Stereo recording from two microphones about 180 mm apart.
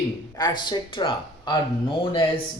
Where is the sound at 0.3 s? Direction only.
25° left (ahead or behind).